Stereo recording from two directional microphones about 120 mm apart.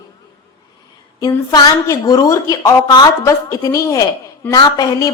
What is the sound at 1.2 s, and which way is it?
A woman's voice, 30° left (ahead or behind).